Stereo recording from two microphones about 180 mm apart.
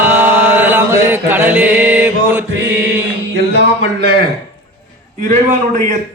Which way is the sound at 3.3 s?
75° right (ahead or behind).